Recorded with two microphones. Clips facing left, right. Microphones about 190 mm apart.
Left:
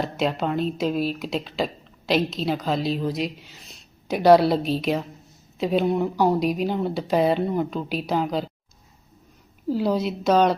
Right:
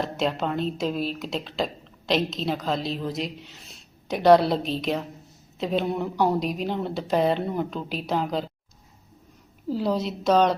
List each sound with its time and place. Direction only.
0.0 s speech: centre (ahead or behind)
9.6 s speech: centre (ahead or behind)